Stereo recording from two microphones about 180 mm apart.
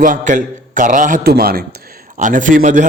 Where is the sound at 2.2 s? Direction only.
45° right (ahead or behind).